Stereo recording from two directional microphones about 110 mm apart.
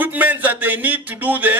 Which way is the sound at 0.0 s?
15° right (ahead or behind).